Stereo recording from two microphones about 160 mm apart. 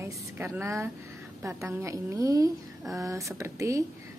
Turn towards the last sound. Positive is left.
turn(degrees=-20)  # may be behind; listen again after turning